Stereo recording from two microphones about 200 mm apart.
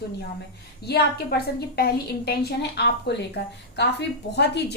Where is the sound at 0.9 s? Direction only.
55° left (ahead or behind).